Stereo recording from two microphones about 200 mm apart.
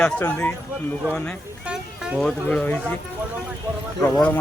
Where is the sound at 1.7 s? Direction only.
Centre (ahead or behind).